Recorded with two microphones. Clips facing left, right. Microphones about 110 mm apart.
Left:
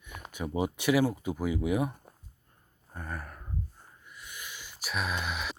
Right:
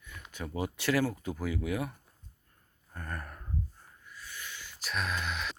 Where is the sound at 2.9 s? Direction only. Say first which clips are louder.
Left 1 dB; 10° left (ahead or behind).